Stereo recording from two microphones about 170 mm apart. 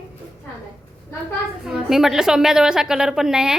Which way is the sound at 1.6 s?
Centre (ahead or behind).